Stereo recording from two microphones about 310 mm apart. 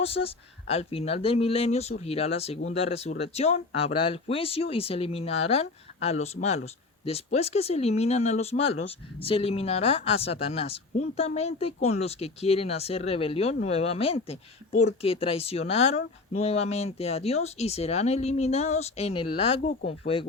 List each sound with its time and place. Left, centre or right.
0.0 s speech: centre